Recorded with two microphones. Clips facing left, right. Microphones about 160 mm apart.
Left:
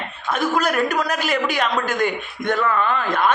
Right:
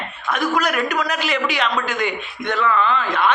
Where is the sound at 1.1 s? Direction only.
45° left (ahead or behind).